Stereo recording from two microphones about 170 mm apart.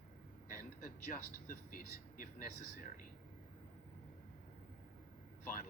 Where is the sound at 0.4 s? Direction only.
55° left (ahead or behind).